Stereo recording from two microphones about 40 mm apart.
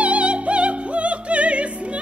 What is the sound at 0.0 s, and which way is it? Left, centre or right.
Music, right.